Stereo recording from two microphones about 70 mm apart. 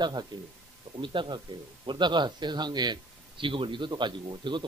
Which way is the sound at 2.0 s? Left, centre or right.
Right.